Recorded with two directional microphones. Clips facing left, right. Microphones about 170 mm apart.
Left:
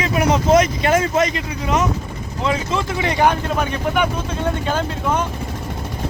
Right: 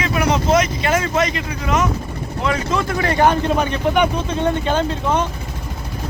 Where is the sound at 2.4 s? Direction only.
25° left (ahead or behind); by 5.2 s 5° left (ahead or behind).